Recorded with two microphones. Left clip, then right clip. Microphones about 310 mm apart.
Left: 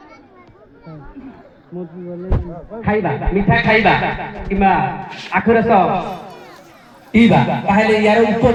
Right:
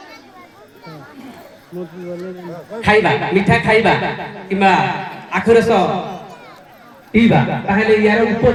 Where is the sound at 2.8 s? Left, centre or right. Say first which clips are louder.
Right 6 dB; centre.